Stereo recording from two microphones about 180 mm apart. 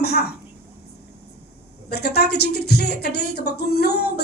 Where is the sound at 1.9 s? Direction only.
65° left (ahead or behind).